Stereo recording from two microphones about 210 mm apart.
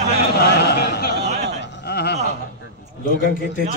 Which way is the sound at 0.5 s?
50° left (ahead or behind).